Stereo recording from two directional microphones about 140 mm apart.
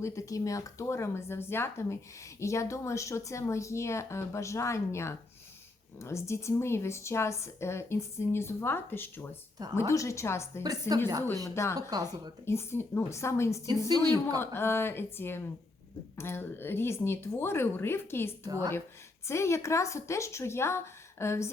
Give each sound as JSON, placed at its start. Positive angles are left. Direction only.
{"t": 0.0, "sound": "a woman's voice", "side_deg": 25}
{"t": 10.6, "sound": "a woman's voice", "side_deg": -25}
{"t": 11.4, "sound": "a woman's voice", "side_deg": 20}
{"t": 13.7, "sound": "a woman's voice", "side_deg": -30}
{"t": 14.3, "sound": "speech", "side_deg": 15}
{"t": 18.4, "sound": "a woman's voice", "side_deg": -25}
{"t": 19.3, "sound": "a woman's voice", "side_deg": 20}